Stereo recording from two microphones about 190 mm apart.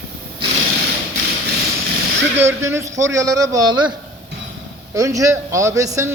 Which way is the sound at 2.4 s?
15° right (ahead or behind).